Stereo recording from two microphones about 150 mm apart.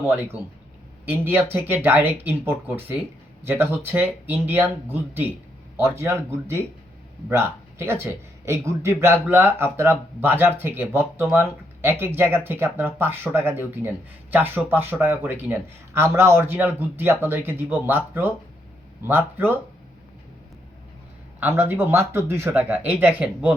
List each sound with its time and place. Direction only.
1.1 s speech: 15° right (ahead or behind)
21.4 s speech: 15° right (ahead or behind)